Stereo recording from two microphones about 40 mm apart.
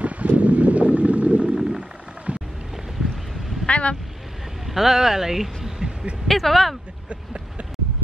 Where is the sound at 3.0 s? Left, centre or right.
Centre.